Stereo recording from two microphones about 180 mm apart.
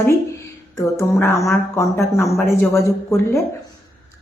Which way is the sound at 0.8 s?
15° left (ahead or behind).